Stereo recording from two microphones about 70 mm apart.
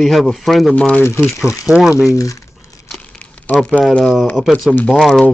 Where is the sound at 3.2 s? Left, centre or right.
Centre.